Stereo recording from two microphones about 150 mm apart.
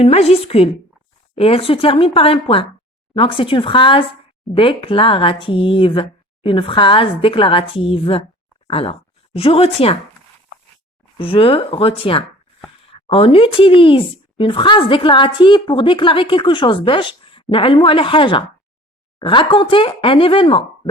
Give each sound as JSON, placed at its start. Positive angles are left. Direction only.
{"t": 0.0, "sound": "a woman's voice", "side_deg": 40}
{"t": 11.2, "sound": "speech", "side_deg": 40}